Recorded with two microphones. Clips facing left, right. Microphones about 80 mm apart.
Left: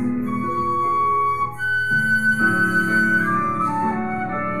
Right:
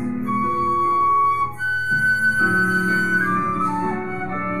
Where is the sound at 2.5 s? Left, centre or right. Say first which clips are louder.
Even; centre.